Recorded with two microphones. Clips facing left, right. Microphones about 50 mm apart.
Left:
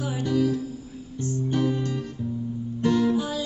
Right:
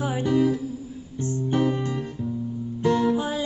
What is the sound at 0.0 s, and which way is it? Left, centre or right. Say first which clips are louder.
Music: right 2 dB; right.